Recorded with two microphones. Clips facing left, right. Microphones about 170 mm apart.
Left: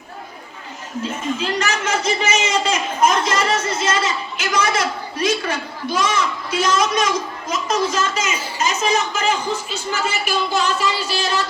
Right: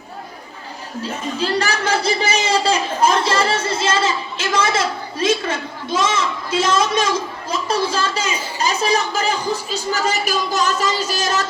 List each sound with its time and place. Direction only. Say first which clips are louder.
1.0 s a man's voice: right 1 dB; 35° right (ahead or behind)